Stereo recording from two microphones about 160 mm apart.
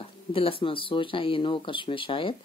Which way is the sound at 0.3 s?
35° left (ahead or behind).